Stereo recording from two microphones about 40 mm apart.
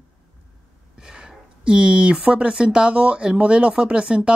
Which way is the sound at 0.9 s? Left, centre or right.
Centre.